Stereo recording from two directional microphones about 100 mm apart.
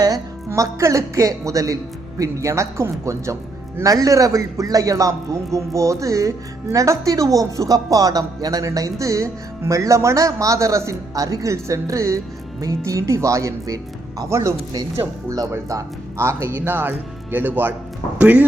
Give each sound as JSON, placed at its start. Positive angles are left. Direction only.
{"t": 0.0, "sound": "a man's voice", "side_deg": -35}